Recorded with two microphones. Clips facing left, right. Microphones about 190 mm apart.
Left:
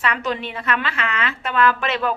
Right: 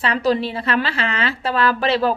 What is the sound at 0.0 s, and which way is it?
A woman's voice, 35° right (ahead or behind).